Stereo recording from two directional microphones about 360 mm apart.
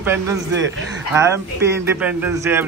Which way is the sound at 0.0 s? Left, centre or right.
Centre.